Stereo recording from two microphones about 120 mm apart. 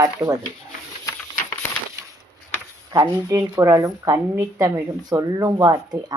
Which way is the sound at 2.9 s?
30° right (ahead or behind).